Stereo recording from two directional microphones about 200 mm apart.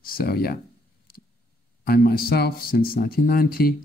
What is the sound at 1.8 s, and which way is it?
Speech, 50° left (ahead or behind).